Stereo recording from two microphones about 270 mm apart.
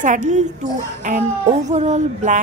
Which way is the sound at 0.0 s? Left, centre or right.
Right.